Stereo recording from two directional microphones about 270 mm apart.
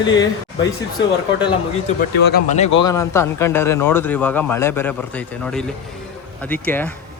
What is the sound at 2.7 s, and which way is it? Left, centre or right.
Speech, centre.